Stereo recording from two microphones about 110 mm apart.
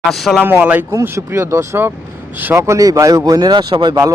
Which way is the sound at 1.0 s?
25° right (ahead or behind).